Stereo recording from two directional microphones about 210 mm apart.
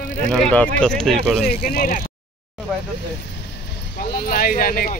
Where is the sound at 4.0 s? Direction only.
45° left (ahead or behind).